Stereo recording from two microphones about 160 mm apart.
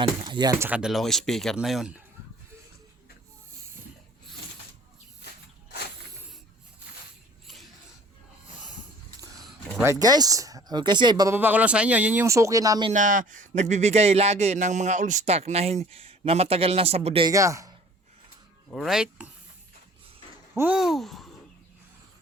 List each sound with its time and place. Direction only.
0.3 s speech: 25° right (ahead or behind)
0.6 s speech: 5° right (ahead or behind)
9.8 s speech: 20° right (ahead or behind)
11.3 s speech: 10° right (ahead or behind)
12.9 s a man's voice: 55° right (ahead or behind)
17.2 s speech: 20° right (ahead or behind)
18.7 s speech: centre (ahead or behind)
20.5 s speech: 10° right (ahead or behind)